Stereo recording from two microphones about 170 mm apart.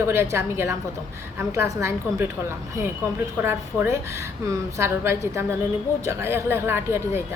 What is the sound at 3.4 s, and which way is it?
A woman's voice, 15° right (ahead or behind).